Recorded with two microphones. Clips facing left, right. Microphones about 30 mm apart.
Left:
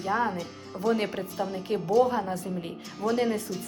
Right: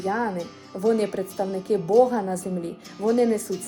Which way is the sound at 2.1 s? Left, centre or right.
Left.